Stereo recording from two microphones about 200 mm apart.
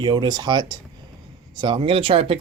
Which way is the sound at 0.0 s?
20° right (ahead or behind).